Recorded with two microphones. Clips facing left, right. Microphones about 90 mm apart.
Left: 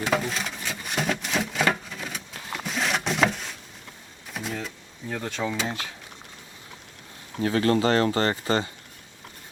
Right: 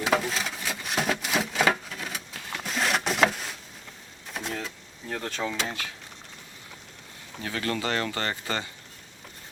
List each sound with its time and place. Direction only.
0.0 s a sound: centre (ahead or behind)
4.3 s vehicle: centre (ahead or behind)
7.4 s speech: 35° left (ahead or behind)